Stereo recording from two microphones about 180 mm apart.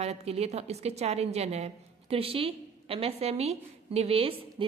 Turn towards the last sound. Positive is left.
turn(degrees=-30)  # may be behind; listen again after turning